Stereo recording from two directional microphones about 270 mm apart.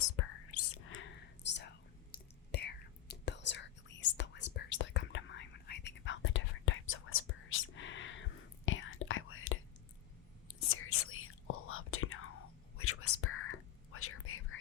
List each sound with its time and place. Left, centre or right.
0.2 s whispering: left
10.7 s whispering: left